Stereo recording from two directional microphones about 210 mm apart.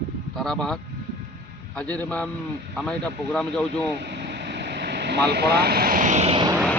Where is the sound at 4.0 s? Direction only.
55° right (ahead or behind).